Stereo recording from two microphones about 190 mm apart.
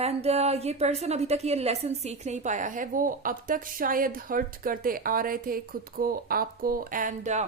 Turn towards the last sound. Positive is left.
turn(degrees=-40)  # may be behind; listen again after turning